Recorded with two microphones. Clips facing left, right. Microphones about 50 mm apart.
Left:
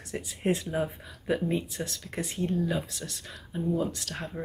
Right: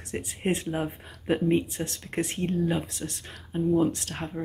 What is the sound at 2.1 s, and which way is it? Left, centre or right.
Speech, right.